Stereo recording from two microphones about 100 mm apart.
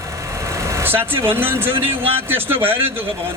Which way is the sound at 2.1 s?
20° right (ahead or behind).